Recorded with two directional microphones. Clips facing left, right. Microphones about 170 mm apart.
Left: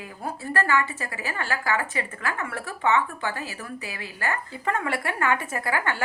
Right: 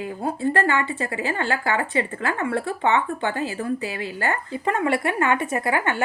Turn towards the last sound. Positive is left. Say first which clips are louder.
# right 4 dB
turn(degrees=-20)  # may be behind; listen again after turning